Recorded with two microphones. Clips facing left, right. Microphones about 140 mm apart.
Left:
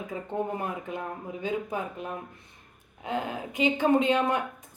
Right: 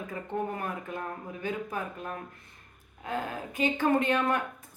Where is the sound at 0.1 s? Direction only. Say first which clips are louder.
Left 2 dB; 15° left (ahead or behind).